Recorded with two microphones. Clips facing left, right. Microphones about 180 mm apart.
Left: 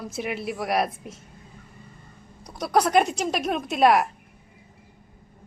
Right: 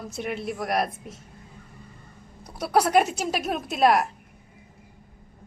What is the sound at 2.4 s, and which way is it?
A woman's voice, 5° right (ahead or behind).